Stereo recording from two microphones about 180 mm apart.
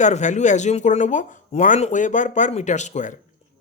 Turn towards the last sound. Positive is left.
turn(degrees=40)  # may be behind; listen again after turning